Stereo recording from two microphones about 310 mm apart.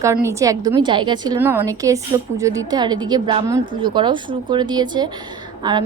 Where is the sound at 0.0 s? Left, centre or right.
Centre.